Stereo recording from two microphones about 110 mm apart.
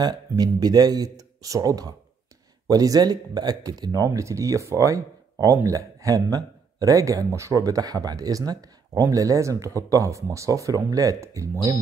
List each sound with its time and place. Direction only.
0.0 s speech: 40° right (ahead or behind)